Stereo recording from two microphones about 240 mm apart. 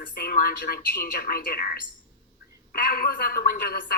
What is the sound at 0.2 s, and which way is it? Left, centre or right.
A man's voice, left.